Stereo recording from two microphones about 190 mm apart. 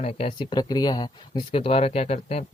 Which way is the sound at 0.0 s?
30° left (ahead or behind).